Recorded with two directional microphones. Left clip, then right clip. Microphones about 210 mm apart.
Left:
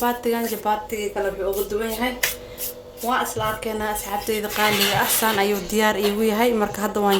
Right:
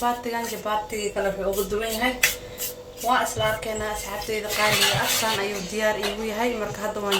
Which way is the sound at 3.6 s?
50° left (ahead or behind).